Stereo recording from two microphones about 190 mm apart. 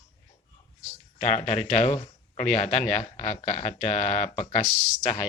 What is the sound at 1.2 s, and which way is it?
Speech, 35° left (ahead or behind).